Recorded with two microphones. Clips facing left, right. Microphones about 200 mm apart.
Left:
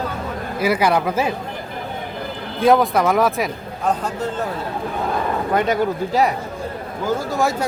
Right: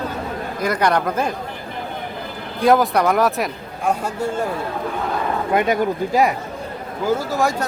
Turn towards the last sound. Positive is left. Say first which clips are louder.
# even
turn(degrees=0)  # may be behind; listen again after turning